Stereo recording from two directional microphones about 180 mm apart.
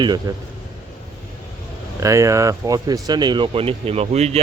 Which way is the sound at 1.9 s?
15° right (ahead or behind).